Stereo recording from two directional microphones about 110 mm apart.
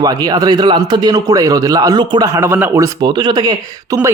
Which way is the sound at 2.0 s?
45° right (ahead or behind).